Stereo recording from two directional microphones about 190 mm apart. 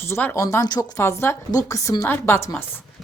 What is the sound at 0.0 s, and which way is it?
A woman's voice, 10° left (ahead or behind).